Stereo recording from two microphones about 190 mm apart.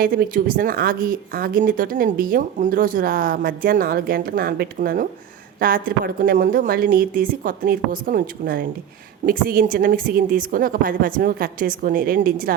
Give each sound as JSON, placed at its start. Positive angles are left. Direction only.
{"t": 0.0, "sound": "speech", "side_deg": -50}